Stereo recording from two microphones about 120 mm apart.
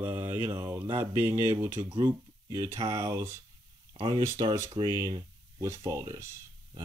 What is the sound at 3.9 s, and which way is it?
Speech, 40° right (ahead or behind).